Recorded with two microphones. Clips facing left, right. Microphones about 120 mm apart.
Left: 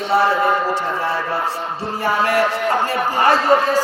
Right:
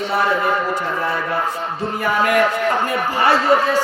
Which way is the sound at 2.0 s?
30° left (ahead or behind).